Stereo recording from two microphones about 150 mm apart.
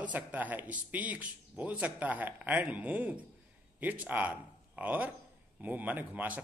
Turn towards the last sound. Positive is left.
turn(degrees=-10)  # may be behind; listen again after turning